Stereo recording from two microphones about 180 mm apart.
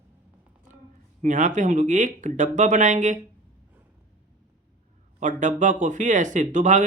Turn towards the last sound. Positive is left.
turn(degrees=-45)  # may be behind; listen again after turning